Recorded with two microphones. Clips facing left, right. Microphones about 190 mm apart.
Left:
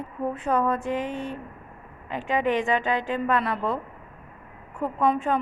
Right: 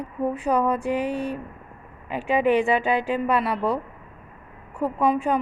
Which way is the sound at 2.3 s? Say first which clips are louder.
Right 4 dB; 15° right (ahead or behind).